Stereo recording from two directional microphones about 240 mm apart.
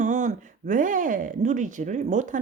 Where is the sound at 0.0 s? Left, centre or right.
Right.